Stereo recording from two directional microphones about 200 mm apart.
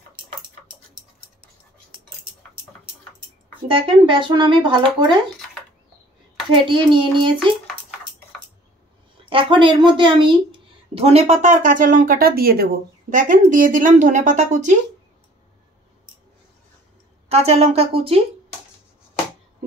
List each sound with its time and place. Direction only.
3.6 s speech: 25° right (ahead or behind)
6.5 s speech: 25° right (ahead or behind)
9.2 s a woman's voice: 25° right (ahead or behind)
17.3 s a woman's voice: 30° right (ahead or behind)